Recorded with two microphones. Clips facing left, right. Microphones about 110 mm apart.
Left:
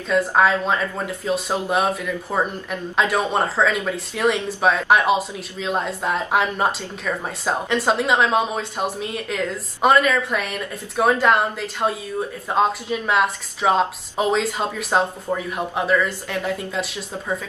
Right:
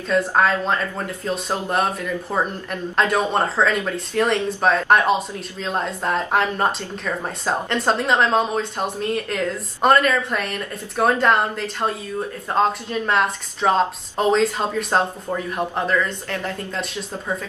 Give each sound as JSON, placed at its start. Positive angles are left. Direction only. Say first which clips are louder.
{"t": 0.4, "sound": "a woman's voice", "louder": "left 1 dB", "side_deg": 5}